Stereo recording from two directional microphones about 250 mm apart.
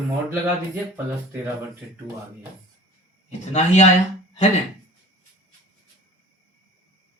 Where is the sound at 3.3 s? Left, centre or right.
Left.